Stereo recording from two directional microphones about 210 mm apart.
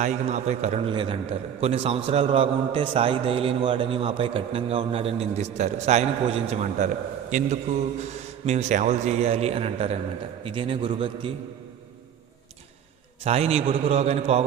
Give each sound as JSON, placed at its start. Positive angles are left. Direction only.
{"t": 0.0, "sound": "a man's voice", "side_deg": -35}
{"t": 13.2, "sound": "a man's voice", "side_deg": -30}